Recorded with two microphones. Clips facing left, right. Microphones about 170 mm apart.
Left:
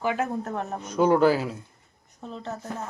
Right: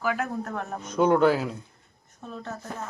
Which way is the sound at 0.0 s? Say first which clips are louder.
Left 2 dB; 25° left (ahead or behind).